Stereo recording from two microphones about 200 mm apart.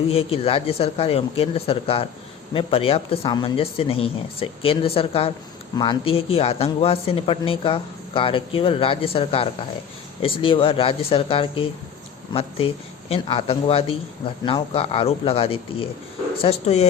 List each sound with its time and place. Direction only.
0.1 s speech: 30° left (ahead or behind)